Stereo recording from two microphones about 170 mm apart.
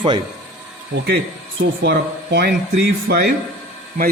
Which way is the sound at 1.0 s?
85° right.